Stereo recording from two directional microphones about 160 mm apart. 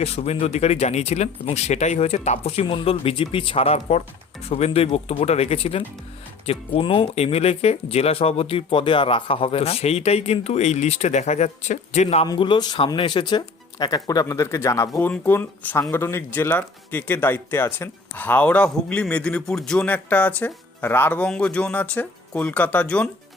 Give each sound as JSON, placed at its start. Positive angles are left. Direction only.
{"t": 0.0, "sound": "speech", "side_deg": 40}
{"t": 12.2, "sound": "speech", "side_deg": 30}